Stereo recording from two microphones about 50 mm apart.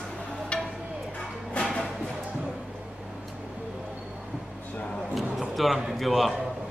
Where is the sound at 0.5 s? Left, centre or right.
Left.